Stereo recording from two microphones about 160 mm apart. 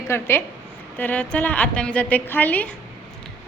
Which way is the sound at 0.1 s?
15° left (ahead or behind).